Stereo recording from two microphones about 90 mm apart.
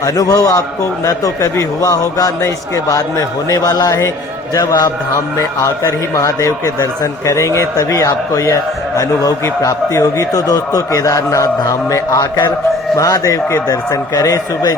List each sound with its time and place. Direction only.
0.0 s a man's voice: 40° left (ahead or behind)
5.1 s a man's voice: 35° left (ahead or behind)